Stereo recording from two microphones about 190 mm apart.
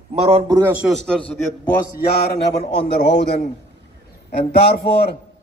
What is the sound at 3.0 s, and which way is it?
Speech, 65° left (ahead or behind).